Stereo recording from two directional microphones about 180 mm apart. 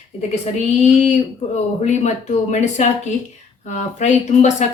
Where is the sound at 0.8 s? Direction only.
40° left (ahead or behind).